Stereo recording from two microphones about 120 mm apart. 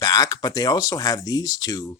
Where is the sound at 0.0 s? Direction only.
30° left (ahead or behind).